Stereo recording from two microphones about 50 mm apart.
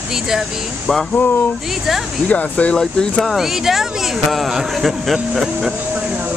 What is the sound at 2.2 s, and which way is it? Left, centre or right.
Speech, left.